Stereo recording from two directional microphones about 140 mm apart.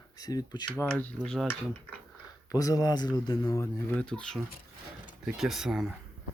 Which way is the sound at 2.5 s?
25° left (ahead or behind).